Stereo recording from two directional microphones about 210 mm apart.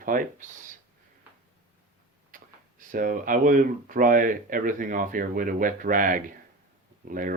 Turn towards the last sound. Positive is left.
turn(degrees=-40)  # may be behind; listen again after turning